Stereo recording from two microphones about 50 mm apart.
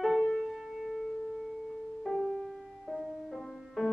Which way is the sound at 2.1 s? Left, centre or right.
Centre.